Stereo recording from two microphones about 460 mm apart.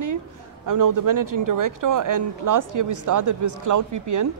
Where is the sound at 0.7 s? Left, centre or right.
Right.